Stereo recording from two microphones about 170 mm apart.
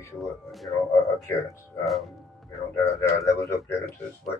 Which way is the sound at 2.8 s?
15° left (ahead or behind).